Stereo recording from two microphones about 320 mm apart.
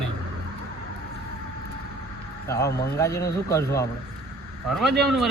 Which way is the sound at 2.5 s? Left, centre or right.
Centre.